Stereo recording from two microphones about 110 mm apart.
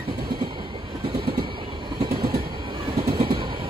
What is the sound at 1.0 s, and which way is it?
Train, 50° right (ahead or behind).